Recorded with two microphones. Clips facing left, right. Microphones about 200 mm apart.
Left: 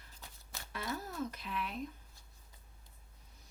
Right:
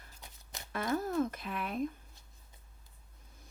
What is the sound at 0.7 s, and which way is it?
Speech, 50° right (ahead or behind).